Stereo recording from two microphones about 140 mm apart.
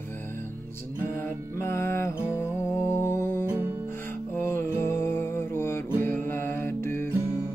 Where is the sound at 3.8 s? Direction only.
15° left (ahead or behind).